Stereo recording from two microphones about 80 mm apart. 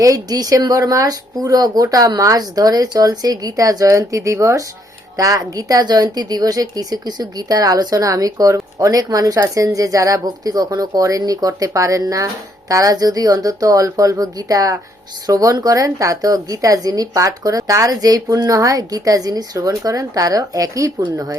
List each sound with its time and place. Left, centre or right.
0.0 s a woman's voice: right